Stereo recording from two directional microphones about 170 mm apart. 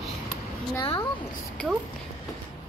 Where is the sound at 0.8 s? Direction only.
30° left (ahead or behind).